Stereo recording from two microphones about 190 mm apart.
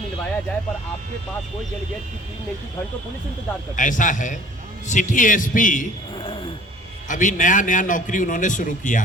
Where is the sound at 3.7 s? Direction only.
40° left (ahead or behind).